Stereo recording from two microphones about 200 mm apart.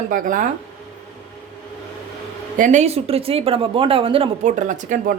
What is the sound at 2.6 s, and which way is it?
Speech, 35° right (ahead or behind).